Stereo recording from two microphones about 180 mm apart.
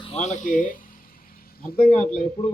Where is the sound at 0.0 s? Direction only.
35° left (ahead or behind); by 1.8 s 55° left (ahead or behind).